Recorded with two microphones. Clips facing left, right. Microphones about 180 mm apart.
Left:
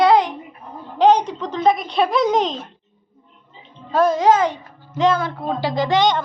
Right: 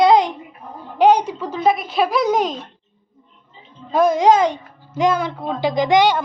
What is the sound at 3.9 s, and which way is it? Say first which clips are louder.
Speech: right 1 dB; 15° right (ahead or behind).